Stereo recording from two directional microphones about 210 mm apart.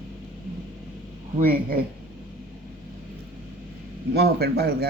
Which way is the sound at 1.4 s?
45° right (ahead or behind).